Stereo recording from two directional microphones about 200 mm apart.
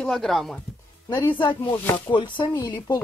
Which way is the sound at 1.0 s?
15° left (ahead or behind).